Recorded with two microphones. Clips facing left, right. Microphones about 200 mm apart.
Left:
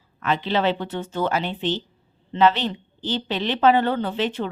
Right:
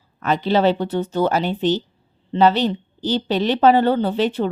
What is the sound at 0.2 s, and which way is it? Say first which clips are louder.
A woman's voice: right 5 dB; 40° right (ahead or behind).